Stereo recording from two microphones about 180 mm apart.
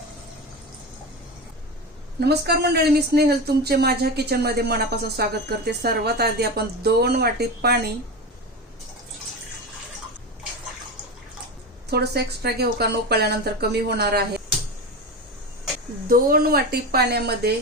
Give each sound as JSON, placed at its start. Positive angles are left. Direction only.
{"t": 2.2, "sound": "speech", "side_deg": -65}
{"t": 11.9, "sound": "speech", "side_deg": -60}
{"t": 16.0, "sound": "speech", "side_deg": -55}